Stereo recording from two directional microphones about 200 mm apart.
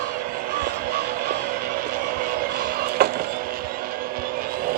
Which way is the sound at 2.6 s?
45° right (ahead or behind).